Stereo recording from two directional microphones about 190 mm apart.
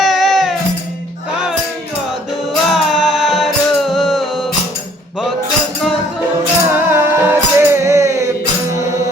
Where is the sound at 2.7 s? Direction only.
Centre (ahead or behind).